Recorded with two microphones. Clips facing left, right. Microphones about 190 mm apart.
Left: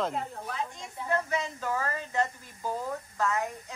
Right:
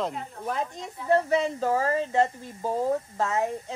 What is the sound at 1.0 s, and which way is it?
Speech, 30° right (ahead or behind).